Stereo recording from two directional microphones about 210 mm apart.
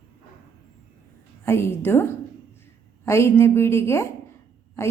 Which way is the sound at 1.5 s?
10° left (ahead or behind).